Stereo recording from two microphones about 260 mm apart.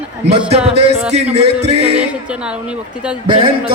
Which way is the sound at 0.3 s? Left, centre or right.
Right.